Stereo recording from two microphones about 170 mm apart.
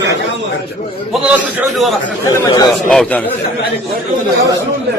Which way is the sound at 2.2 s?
20° left (ahead or behind).